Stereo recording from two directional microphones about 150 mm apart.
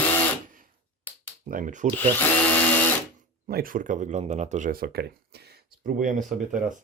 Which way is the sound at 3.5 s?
80° right.